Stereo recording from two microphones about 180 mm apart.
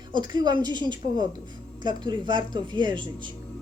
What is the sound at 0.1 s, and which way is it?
A woman's voice, 25° right (ahead or behind).